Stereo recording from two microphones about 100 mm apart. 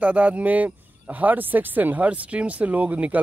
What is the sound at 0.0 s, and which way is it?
Speech, 15° right (ahead or behind).